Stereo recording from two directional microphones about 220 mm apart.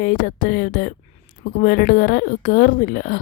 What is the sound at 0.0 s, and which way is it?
A woman's voice, 40° left (ahead or behind).